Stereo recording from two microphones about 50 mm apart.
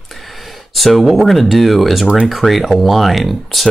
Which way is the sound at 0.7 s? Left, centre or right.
Centre.